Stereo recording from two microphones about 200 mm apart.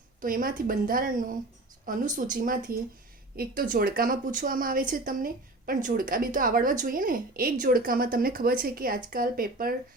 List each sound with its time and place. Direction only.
0.2 s speech: 45° right (ahead or behind)